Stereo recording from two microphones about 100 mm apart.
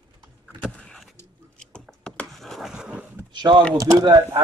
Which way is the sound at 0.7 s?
5° left (ahead or behind).